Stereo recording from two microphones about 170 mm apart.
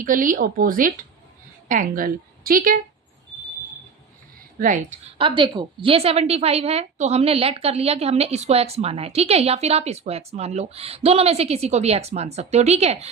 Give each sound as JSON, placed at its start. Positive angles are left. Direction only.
{"t": 0.0, "sound": "a woman's voice", "side_deg": -50}
{"t": 4.6, "sound": "speech", "side_deg": -50}
{"t": 5.1, "sound": "a woman's voice", "side_deg": -30}